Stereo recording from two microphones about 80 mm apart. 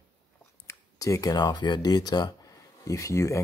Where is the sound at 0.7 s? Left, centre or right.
Left.